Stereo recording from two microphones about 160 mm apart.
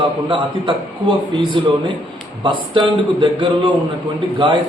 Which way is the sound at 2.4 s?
30° right (ahead or behind).